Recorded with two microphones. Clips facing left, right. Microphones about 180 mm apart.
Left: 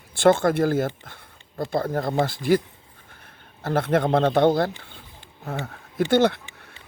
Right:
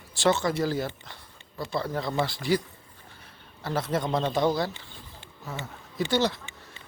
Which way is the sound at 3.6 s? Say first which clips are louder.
Left 7 dB; 55° left (ahead or behind).